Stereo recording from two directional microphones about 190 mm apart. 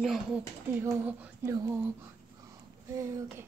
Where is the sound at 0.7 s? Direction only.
10° right (ahead or behind).